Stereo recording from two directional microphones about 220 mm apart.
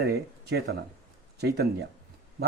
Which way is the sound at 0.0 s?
45° right (ahead or behind).